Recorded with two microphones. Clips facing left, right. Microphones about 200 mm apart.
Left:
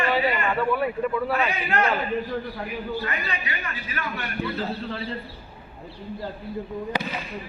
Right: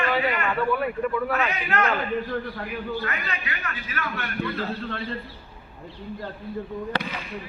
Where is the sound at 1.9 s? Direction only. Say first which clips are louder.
Even; 15° left (ahead or behind).